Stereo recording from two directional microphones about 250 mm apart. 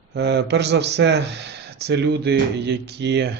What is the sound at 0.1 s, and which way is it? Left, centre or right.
Speech, right.